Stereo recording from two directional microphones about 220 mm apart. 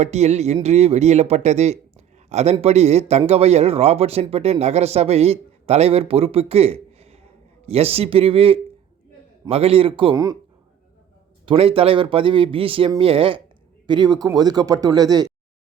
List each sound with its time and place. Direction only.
0.0 s speech: 30° right (ahead or behind)
11.4 s a man's voice: 25° right (ahead or behind)